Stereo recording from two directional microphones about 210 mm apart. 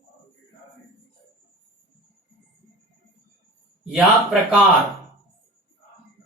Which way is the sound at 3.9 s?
5° right (ahead or behind).